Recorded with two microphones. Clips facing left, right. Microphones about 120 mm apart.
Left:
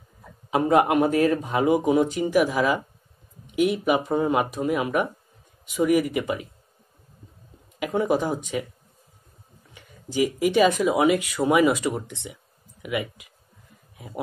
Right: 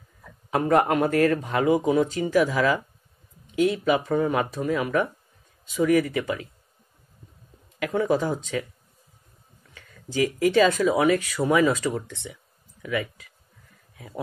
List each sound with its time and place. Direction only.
0.2 s speech: 20° left (ahead or behind)
7.8 s speech: 15° left (ahead or behind)
9.8 s speech: 15° left (ahead or behind)